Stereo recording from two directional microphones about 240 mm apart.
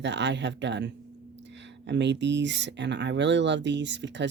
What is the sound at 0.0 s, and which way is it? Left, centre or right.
Speech, right.